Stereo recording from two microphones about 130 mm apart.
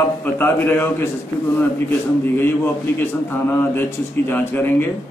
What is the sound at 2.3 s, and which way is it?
Speech, 15° left (ahead or behind).